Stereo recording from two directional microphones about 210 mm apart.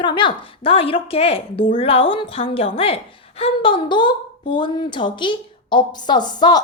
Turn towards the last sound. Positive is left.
turn(degrees=20)  # may be behind; listen again after turning